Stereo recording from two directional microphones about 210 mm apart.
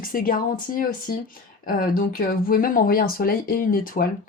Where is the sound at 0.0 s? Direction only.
40° left (ahead or behind).